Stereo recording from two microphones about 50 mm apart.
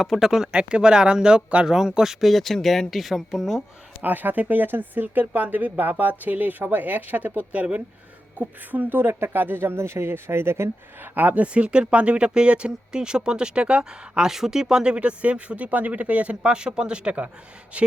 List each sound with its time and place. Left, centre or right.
0.0 s speech: centre
2.3 s speech: centre
4.0 s speech: right
11.0 s speech: right
14.3 s speech: centre; by 17.9 s right